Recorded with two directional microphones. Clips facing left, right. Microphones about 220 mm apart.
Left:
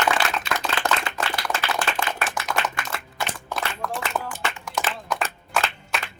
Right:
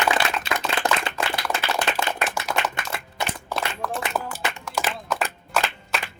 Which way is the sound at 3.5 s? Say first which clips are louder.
Right 1 dB; 5° right (ahead or behind).